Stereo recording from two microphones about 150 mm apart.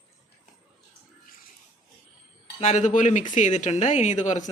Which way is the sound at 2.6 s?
55° left (ahead or behind).